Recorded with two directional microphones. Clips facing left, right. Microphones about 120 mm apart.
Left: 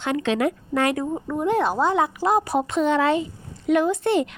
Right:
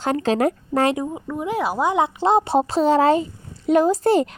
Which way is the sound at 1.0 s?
Centre (ahead or behind).